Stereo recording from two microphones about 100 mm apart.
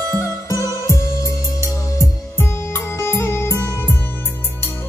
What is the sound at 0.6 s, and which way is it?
Music, 30° right (ahead or behind).